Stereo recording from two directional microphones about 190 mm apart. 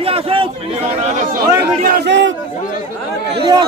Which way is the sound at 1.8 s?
55° right (ahead or behind).